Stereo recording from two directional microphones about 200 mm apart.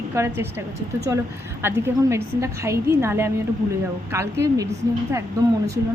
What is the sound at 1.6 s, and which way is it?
A woman's voice, 10° right (ahead or behind).